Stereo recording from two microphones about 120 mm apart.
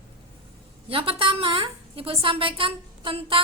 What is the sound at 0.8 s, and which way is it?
A woman's voice, 50° right (ahead or behind).